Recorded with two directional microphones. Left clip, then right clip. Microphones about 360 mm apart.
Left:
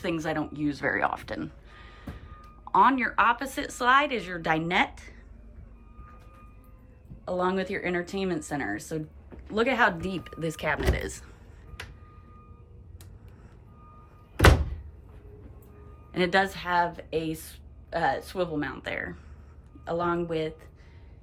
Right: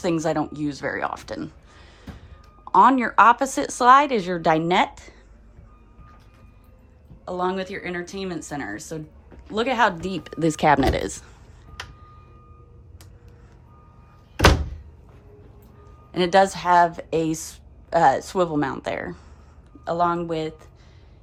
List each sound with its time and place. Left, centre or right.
0.0 s a woman's voice: centre
7.3 s a woman's voice: centre
16.1 s a woman's voice: centre